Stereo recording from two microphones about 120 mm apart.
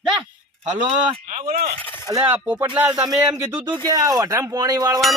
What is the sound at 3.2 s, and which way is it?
Speech, 30° right (ahead or behind).